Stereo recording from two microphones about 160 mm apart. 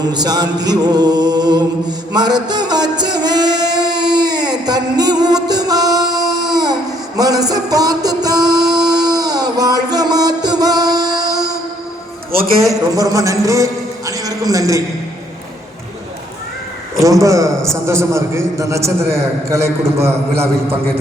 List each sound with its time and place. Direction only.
0.0 s music: 25° right (ahead or behind)
2.1 s a sound: 25° right (ahead or behind)
7.2 s music: 25° right (ahead or behind)
12.9 s music: 20° right (ahead or behind)
14.1 s a sound: 20° right (ahead or behind)
17.0 s music: 20° right (ahead or behind)
17.8 s a man's voice: 15° right (ahead or behind)